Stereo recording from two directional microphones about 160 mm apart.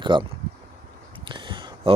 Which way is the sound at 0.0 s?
30° right (ahead or behind).